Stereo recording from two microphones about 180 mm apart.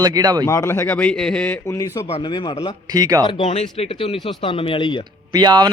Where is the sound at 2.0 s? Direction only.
30° left (ahead or behind).